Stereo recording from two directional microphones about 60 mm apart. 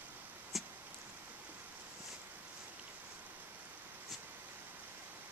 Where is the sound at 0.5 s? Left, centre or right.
Centre.